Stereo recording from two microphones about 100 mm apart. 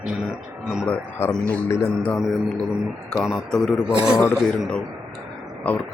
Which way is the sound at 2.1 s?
Centre (ahead or behind).